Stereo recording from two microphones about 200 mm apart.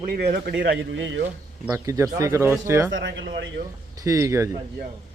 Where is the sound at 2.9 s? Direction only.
65° right (ahead or behind).